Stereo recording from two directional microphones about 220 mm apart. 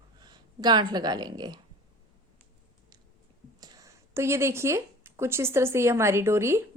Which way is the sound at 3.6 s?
15° right (ahead or behind).